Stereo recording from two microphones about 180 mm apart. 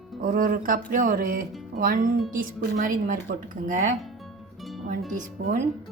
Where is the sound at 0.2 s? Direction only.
50° right (ahead or behind).